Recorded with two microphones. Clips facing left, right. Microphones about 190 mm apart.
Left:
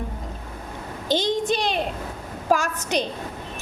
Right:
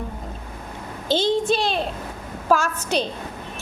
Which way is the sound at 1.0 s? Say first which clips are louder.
Right 2 dB; 15° left (ahead or behind).